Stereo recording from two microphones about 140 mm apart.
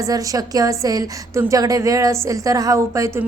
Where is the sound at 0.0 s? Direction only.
25° right (ahead or behind).